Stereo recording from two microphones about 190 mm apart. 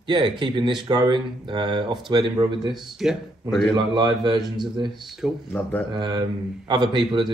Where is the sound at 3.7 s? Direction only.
25° right (ahead or behind).